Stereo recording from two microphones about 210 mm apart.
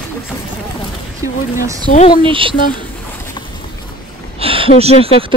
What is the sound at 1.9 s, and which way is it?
Speech, 40° left (ahead or behind).